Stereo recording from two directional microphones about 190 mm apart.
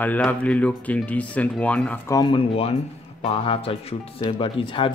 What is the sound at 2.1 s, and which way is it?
Speech, 25° left (ahead or behind).